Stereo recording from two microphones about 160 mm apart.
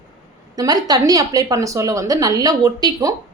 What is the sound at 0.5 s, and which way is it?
A woman's voice, 25° right (ahead or behind).